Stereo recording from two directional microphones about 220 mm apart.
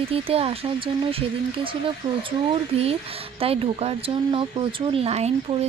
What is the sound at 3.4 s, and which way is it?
Speech, 25° right (ahead or behind).